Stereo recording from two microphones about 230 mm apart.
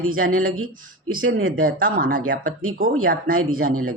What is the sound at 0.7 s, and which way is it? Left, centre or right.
Speech, right.